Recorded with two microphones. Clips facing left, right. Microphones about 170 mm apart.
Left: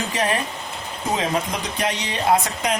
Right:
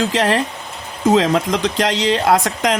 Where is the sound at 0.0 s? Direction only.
85° right.